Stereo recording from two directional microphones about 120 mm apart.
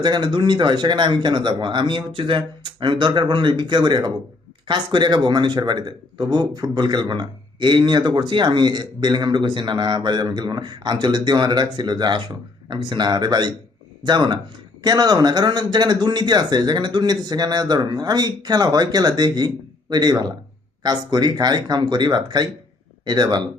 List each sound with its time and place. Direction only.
0.0 s a man's voice: 40° right (ahead or behind)